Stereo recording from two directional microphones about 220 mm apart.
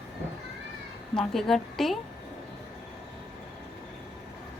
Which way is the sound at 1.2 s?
Centre (ahead or behind).